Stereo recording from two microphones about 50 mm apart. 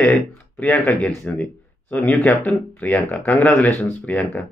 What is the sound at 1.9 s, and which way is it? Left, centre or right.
Speech, left.